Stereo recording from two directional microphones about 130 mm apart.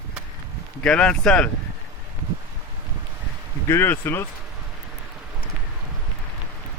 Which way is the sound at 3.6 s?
20° left (ahead or behind).